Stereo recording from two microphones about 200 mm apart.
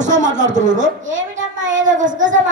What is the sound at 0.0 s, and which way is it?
Speech, 35° right (ahead or behind).